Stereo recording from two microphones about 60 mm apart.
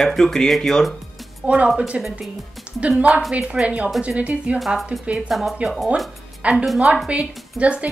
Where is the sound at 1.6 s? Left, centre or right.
Centre.